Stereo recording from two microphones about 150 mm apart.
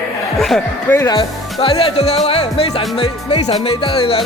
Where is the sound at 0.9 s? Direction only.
10° left (ahead or behind).